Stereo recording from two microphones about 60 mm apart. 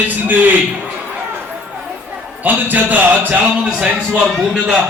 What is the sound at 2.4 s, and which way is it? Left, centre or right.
A man's voice, right.